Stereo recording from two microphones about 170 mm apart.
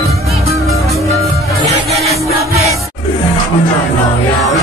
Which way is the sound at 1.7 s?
40° right (ahead or behind).